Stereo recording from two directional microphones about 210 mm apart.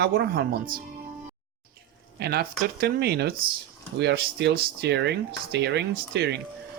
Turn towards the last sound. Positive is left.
turn(degrees=-55)  # may be behind; listen again after turning